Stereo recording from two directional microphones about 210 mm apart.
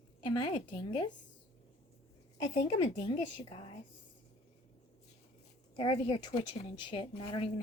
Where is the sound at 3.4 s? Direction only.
25° left (ahead or behind).